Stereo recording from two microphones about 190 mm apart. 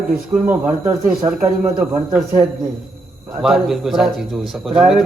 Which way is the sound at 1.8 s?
5° right (ahead or behind).